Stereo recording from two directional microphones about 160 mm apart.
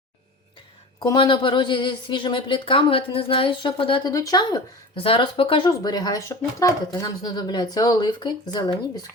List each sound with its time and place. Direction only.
0.9 s a woman's voice: 25° left (ahead or behind)